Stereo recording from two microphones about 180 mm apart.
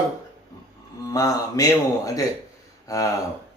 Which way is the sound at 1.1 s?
20° left (ahead or behind).